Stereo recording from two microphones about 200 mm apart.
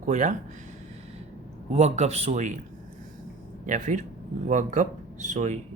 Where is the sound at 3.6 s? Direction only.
40° right (ahead or behind).